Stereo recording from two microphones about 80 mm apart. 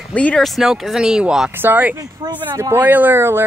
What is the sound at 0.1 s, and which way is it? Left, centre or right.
Speech, centre.